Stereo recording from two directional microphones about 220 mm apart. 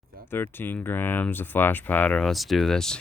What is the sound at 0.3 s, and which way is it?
Speech, 10° left (ahead or behind).